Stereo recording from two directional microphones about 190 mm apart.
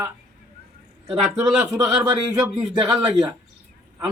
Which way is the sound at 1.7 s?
15° right (ahead or behind).